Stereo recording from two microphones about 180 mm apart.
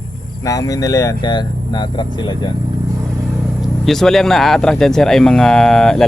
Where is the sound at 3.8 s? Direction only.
Centre (ahead or behind).